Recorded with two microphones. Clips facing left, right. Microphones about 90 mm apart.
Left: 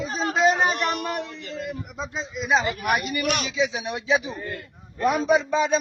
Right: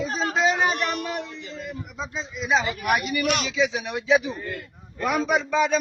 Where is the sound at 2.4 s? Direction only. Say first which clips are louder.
Left 1 dB; 45° left (ahead or behind).